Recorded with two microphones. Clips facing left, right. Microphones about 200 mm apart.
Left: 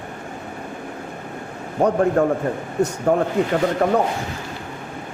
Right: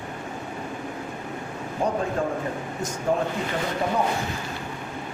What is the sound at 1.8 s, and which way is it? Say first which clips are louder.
A man's voice: left 8 dB; 65° left (ahead or behind).